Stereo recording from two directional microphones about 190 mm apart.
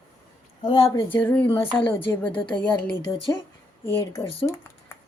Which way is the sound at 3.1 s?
25° left (ahead or behind).